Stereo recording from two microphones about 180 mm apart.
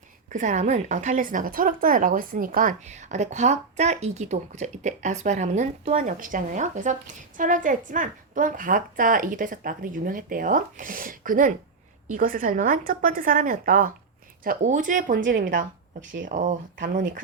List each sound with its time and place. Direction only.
0.3 s a woman's voice: 45° right (ahead or behind)
16.2 s a woman's voice: 45° right (ahead or behind)